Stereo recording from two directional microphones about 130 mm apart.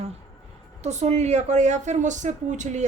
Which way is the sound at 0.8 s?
60° right (ahead or behind).